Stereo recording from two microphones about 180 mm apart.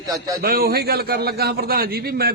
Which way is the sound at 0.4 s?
55° right (ahead or behind).